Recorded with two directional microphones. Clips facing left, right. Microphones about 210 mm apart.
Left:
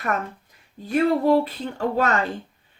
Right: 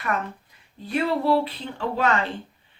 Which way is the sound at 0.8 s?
45° left (ahead or behind).